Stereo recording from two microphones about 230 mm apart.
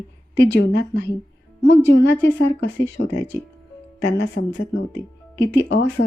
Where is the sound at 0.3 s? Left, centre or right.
Left.